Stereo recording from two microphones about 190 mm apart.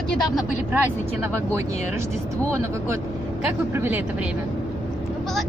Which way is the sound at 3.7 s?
10° right (ahead or behind).